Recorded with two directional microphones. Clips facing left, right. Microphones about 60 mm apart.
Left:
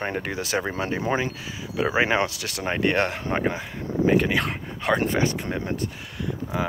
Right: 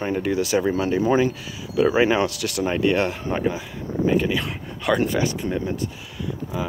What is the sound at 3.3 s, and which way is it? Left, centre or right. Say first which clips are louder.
Speech: right 1 dB; left.